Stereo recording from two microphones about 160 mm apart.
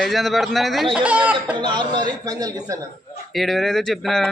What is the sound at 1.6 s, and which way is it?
A man's voice, 30° right (ahead or behind).